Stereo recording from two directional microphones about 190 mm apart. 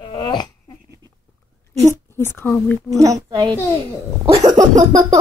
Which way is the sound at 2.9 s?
20° right (ahead or behind).